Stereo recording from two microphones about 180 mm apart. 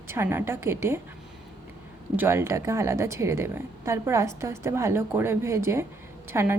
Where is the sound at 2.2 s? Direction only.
15° right (ahead or behind).